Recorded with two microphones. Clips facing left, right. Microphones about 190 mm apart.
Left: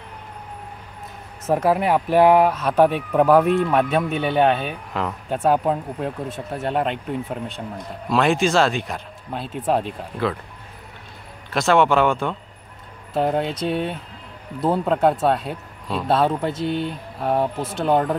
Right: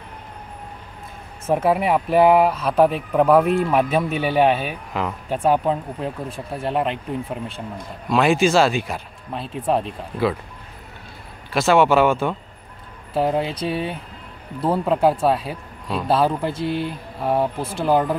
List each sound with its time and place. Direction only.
1.5 s speech: centre (ahead or behind)
11.5 s speech: 5° right (ahead or behind)
17.6 s speech: 20° left (ahead or behind)
17.8 s speech: centre (ahead or behind)